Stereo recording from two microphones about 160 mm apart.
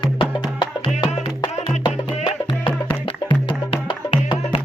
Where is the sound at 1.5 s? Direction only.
45° left (ahead or behind).